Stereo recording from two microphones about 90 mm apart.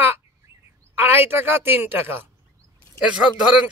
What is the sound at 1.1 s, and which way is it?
Speech, 25° right (ahead or behind).